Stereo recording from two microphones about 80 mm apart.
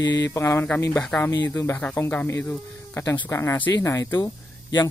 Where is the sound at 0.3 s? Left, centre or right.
Left.